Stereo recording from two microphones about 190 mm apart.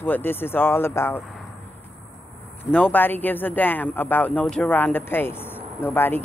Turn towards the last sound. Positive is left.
turn(degrees=10)  # may be behind; listen again after turning